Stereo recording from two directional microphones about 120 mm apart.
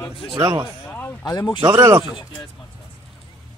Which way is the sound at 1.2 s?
35° left (ahead or behind).